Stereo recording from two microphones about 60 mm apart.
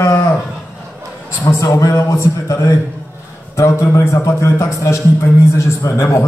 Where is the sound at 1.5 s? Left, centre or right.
Left.